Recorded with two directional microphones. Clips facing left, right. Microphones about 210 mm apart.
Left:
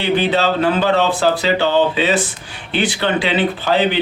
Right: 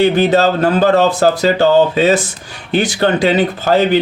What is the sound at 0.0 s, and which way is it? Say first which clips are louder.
Speech: right 5 dB; 45° right (ahead or behind).